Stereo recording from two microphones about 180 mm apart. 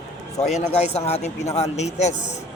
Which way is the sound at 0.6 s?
35° left (ahead or behind).